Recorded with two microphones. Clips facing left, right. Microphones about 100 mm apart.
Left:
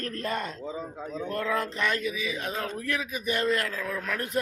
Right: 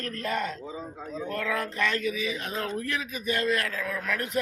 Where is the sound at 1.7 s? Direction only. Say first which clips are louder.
Even; 20° left (ahead or behind).